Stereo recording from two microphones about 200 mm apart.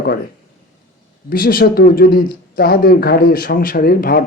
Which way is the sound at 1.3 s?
45° left (ahead or behind).